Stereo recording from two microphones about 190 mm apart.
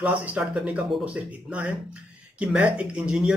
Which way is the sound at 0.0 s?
10° right (ahead or behind).